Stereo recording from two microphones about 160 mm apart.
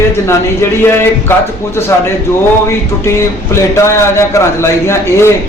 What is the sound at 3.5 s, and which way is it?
A man's voice, 15° left (ahead or behind).